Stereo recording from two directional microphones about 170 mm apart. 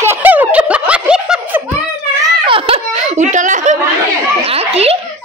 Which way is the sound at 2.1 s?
25° right (ahead or behind).